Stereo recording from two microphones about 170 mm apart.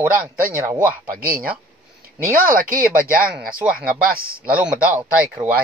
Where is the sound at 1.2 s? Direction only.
60° right (ahead or behind).